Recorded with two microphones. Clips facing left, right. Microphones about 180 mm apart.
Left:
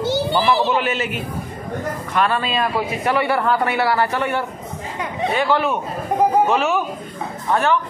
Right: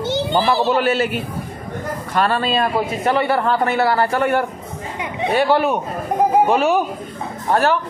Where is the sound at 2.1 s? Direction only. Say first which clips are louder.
Right 2 dB; 35° right (ahead or behind).